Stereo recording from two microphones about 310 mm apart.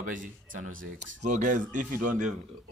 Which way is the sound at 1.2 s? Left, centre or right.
Right.